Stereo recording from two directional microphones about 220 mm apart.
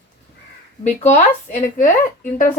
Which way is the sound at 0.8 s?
30° left (ahead or behind).